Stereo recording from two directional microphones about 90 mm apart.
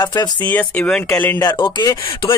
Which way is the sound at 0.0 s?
45° left (ahead or behind).